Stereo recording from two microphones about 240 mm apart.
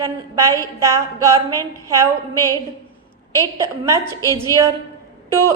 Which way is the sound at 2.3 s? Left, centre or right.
Centre.